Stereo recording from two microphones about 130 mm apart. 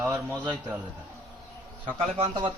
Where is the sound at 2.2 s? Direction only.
35° right (ahead or behind).